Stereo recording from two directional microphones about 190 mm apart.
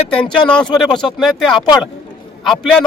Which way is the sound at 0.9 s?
25° left (ahead or behind).